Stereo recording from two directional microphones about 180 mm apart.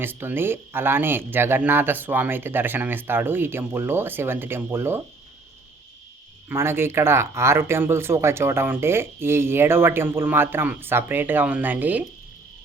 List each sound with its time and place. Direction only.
0.0 s speech: 10° right (ahead or behind)
6.5 s speech: 15° right (ahead or behind)